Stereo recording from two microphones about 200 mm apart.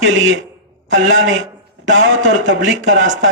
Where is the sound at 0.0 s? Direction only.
65° right (ahead or behind).